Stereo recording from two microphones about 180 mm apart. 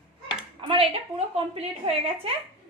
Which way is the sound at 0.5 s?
30° right (ahead or behind).